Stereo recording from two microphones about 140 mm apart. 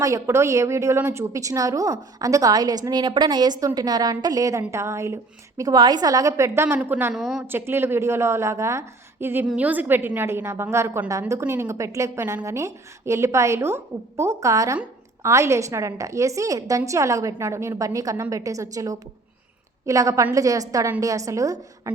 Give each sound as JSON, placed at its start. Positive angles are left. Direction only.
{"t": 0.0, "sound": "a woman's voice", "side_deg": -20}
{"t": 7.1, "sound": "a woman's voice", "side_deg": -5}
{"t": 7.4, "sound": "a woman's voice", "side_deg": -15}